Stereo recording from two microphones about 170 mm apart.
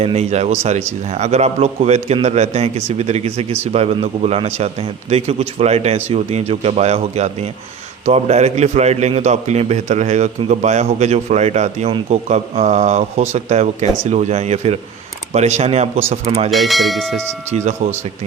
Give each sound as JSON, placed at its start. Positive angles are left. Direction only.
{"t": 0.0, "sound": "a man's voice", "side_deg": -35}
{"t": 16.5, "sound": "bell", "side_deg": 0}
{"t": 17.5, "sound": "a man's voice", "side_deg": -40}